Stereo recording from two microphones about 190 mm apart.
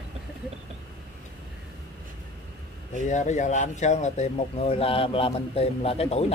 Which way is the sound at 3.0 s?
40° left (ahead or behind).